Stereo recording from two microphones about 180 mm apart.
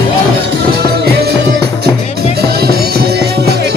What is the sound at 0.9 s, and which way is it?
Music, 65° right (ahead or behind).